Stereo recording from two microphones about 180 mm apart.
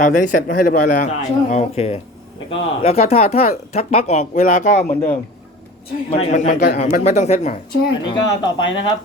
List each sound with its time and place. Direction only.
0.0 s speech: 45° left (ahead or behind)
8.0 s speech: 25° left (ahead or behind)
8.5 s speech: 90° left